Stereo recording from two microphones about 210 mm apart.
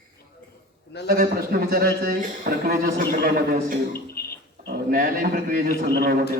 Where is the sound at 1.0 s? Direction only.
45° right (ahead or behind).